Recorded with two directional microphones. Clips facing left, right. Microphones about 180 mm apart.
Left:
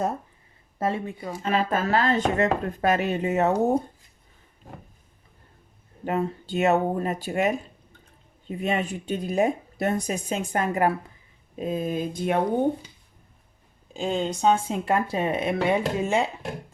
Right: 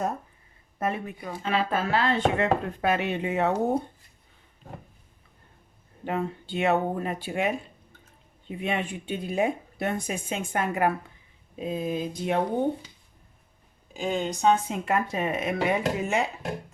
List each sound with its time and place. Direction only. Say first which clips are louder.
0.8 s speech: left 3 dB; 30° left (ahead or behind)
1.3 s speech: left 2 dB; 45° left (ahead or behind)
6.1 s speech: left 3 dB; 40° left (ahead or behind)
11.6 s speech: left 2 dB; 50° left (ahead or behind)
13.9 s speech: left 2 dB; 30° left (ahead or behind)